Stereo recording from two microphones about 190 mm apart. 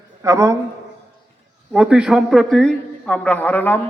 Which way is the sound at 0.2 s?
15° right (ahead or behind).